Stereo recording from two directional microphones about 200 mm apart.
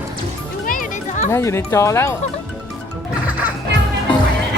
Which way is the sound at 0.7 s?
40° left (ahead or behind).